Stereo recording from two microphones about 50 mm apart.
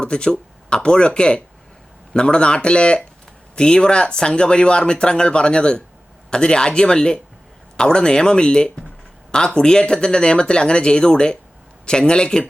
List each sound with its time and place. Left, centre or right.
0.0 s speech: centre